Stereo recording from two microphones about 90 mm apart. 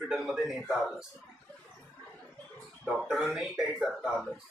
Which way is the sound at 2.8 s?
Centre (ahead or behind).